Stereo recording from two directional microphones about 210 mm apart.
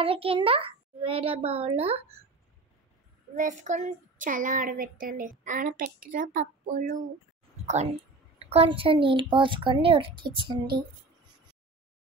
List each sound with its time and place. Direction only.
0.0 s a woman's voice: 25° right (ahead or behind)
3.3 s a woman's voice: 35° right (ahead or behind)